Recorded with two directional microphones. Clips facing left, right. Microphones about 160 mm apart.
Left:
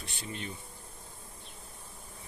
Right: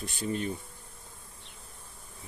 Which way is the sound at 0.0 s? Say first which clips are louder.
Right 9 dB; 45° right (ahead or behind).